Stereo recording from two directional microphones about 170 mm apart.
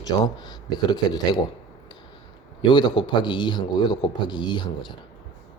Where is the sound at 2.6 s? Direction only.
25° left (ahead or behind).